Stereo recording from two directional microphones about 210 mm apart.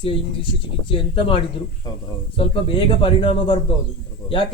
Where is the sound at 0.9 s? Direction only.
25° left (ahead or behind).